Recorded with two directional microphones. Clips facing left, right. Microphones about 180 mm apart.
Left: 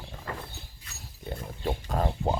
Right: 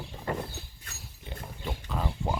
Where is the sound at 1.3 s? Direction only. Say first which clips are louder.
Left 6 dB; 45° left (ahead or behind).